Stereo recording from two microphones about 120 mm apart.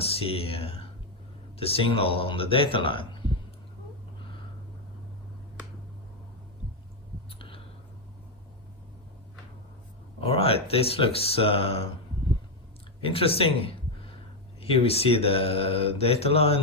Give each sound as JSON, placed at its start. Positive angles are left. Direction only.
{"t": 0.0, "sound": "speech", "side_deg": 55}
{"t": 7.3, "sound": "a sound", "side_deg": 45}
{"t": 10.2, "sound": "speech", "side_deg": 50}
{"t": 13.0, "sound": "speech", "side_deg": 50}